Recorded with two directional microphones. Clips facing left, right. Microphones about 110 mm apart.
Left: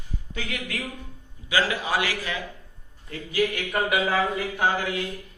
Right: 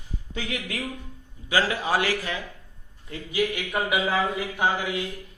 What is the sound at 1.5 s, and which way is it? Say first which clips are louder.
Speech: right 1 dB; 35° right (ahead or behind).